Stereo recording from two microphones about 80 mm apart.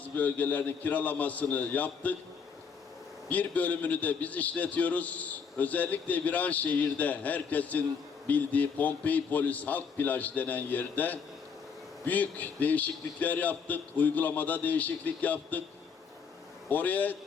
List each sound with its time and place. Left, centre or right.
0.0 s a man's voice: centre
3.2 s a man's voice: centre
16.6 s a man's voice: left